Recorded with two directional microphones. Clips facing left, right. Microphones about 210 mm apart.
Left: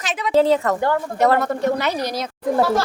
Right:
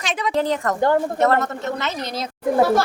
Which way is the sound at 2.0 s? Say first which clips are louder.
Left 3 dB; 25° right (ahead or behind).